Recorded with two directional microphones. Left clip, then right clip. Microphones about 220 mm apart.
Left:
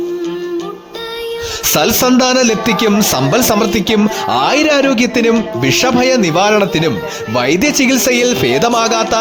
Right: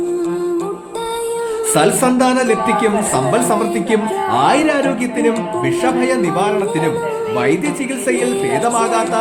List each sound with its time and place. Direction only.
1.7 s a man's voice: 40° left (ahead or behind)